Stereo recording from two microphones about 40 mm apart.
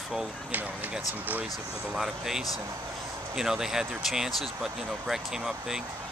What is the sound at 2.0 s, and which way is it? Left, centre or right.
Speech, centre.